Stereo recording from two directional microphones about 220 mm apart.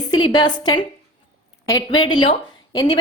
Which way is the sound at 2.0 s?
20° left (ahead or behind).